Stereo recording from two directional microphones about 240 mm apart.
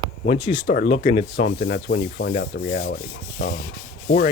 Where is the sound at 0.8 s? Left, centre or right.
Left.